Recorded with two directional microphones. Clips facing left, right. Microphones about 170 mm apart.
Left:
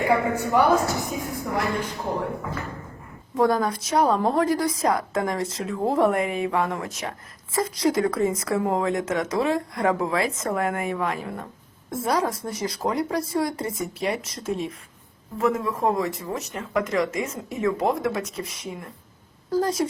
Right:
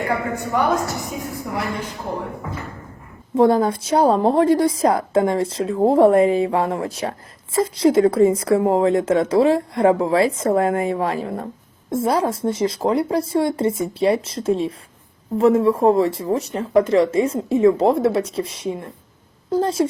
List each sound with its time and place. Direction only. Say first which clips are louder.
0.1 s a woman's voice: left 1 dB; 10° left (ahead or behind)
3.3 s speech: right 6 dB; 25° right (ahead or behind)